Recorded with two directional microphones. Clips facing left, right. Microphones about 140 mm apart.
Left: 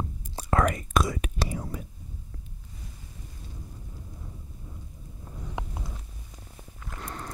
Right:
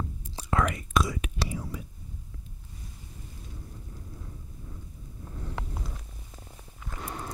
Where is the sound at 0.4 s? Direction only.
45° left (ahead or behind).